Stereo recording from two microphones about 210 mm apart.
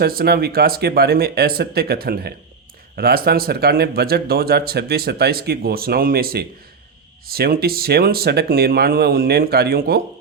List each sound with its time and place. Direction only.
0.0 s speech: 45° right (ahead or behind)